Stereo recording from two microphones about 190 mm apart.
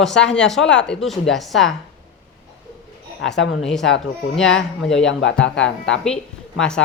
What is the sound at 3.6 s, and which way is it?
A woman's voice, centre (ahead or behind).